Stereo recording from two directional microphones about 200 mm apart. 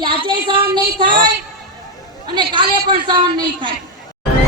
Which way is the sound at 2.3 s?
20° right (ahead or behind).